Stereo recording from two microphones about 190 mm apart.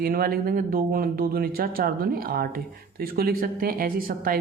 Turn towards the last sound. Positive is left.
turn(degrees=-50)  # may be behind; listen again after turning